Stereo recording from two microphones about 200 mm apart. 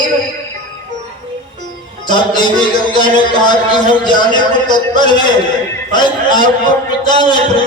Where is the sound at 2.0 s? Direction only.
20° left (ahead or behind).